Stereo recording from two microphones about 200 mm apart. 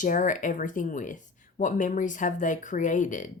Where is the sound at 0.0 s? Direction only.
40° left (ahead or behind).